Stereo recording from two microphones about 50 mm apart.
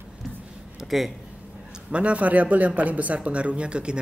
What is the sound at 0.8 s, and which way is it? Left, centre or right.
Speech, centre.